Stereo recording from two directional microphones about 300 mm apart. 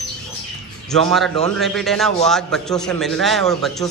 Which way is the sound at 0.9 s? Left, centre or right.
Centre.